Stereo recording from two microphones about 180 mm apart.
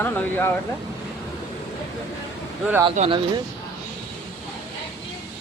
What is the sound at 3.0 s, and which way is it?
Speech, 30° right (ahead or behind).